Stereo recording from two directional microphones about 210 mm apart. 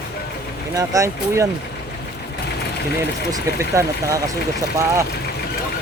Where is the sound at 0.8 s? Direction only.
15° right (ahead or behind).